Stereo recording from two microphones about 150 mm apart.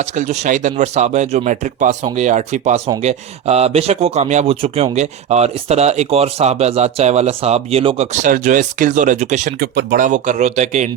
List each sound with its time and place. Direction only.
0.0 s speech: 50° right (ahead or behind)
9.6 s speech: 90° right; by 10.8 s 50° right (ahead or behind)